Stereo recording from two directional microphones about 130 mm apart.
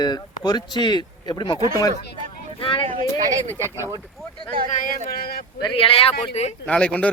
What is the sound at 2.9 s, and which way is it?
Speech, 65° right (ahead or behind).